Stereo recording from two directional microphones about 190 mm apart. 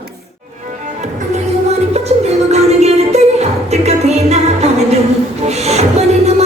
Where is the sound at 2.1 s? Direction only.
35° right (ahead or behind).